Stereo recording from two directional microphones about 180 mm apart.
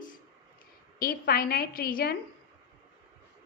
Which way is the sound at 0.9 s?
55° left (ahead or behind).